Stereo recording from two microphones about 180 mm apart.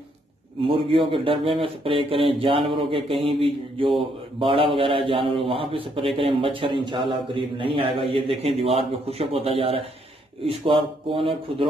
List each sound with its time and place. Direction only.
0.7 s a man's voice: 30° right (ahead or behind)